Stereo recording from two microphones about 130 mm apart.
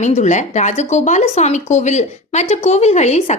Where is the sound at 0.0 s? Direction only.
65° left (ahead or behind).